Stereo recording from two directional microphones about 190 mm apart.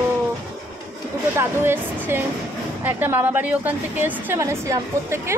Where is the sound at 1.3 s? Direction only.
15° right (ahead or behind).